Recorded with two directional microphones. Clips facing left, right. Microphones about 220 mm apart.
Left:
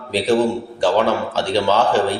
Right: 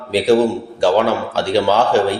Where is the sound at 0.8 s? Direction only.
10° right (ahead or behind).